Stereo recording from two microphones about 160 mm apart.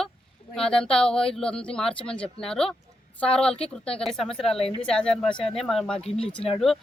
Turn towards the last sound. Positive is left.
turn(degrees=0)  # may be behind; listen again after turning